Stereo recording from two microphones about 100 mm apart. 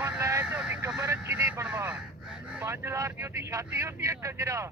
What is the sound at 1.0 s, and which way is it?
Vehicle, 25° right (ahead or behind).